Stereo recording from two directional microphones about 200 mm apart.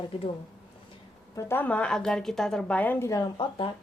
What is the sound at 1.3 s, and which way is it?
A woman's voice, 10° left (ahead or behind).